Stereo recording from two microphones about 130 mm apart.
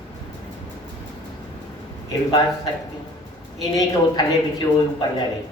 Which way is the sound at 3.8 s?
30° left (ahead or behind).